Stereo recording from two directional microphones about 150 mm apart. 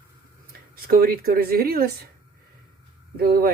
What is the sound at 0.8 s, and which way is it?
Speech, 80° right.